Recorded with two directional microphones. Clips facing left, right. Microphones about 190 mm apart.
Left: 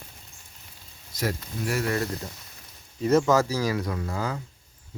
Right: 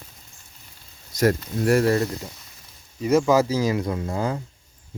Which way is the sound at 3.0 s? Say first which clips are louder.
Right 2 dB; 10° right (ahead or behind).